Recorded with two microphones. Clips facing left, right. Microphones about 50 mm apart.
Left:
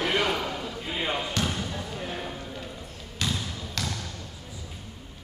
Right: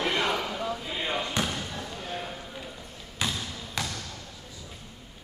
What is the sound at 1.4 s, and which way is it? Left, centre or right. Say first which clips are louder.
Basketball bounce: even; centre.